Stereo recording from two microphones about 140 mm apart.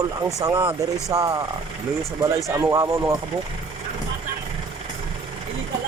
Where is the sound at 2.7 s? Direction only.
20° right (ahead or behind).